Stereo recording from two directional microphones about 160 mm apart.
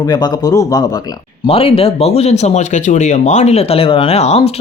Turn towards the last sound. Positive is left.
turn(degrees=40)  # may be behind; listen again after turning